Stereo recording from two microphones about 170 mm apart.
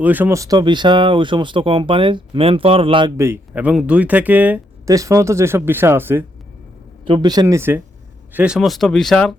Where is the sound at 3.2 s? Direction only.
10° right (ahead or behind).